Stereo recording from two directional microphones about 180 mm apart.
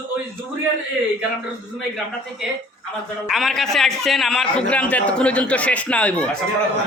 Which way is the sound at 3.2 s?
Centre (ahead or behind).